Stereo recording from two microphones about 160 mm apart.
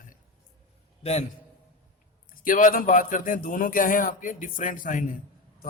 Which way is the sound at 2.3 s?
60° left (ahead or behind).